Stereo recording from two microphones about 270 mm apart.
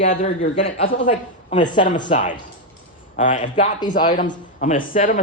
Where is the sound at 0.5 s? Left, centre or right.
Left.